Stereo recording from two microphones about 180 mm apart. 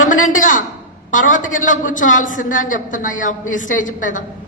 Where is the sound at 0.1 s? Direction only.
45° left (ahead or behind).